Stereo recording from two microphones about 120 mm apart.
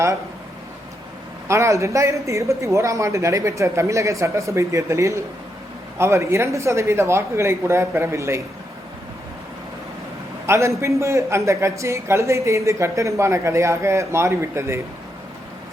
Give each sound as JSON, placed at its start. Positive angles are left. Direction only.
{"t": 1.5, "sound": "a man's voice", "side_deg": -25}
{"t": 10.4, "sound": "a man's voice", "side_deg": -25}